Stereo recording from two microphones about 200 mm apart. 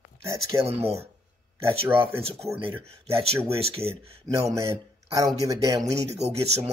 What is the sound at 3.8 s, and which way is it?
Speech, 10° right (ahead or behind).